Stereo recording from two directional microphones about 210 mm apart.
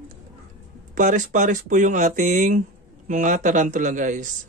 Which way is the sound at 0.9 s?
35° right (ahead or behind).